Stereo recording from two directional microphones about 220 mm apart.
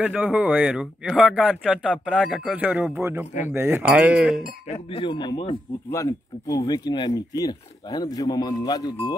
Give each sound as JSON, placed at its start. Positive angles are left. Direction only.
{"t": 0.0, "sound": "speech", "side_deg": -5}
{"t": 3.4, "sound": "cutlery", "side_deg": -10}
{"t": 4.8, "sound": "speech", "side_deg": 25}